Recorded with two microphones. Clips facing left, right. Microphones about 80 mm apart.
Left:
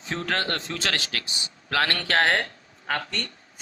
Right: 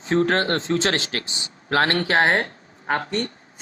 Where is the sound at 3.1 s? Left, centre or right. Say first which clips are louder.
Right 8 dB; right.